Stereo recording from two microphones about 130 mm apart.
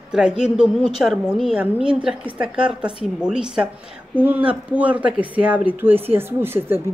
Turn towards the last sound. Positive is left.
turn(degrees=-15)  # may be behind; listen again after turning